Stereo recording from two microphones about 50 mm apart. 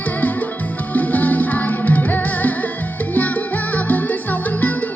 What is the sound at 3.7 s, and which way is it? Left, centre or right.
Music, left.